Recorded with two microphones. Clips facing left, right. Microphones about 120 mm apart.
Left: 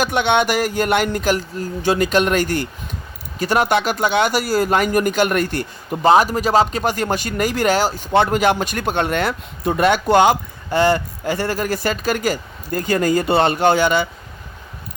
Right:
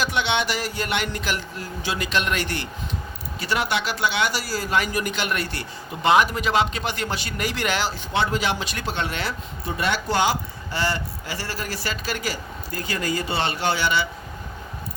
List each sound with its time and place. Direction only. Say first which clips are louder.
0.0 s speech: left 7 dB; 50° left (ahead or behind)